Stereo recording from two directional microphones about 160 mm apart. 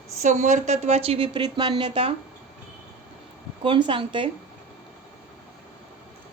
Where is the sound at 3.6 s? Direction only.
30° right (ahead or behind).